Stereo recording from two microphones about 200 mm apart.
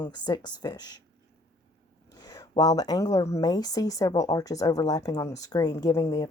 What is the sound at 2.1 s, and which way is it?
Speech, 20° left (ahead or behind).